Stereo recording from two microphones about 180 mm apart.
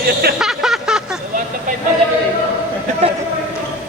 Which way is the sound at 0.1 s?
60° right (ahead or behind).